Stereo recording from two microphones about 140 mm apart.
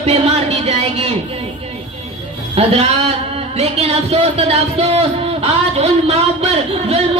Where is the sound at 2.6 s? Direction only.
50° right (ahead or behind).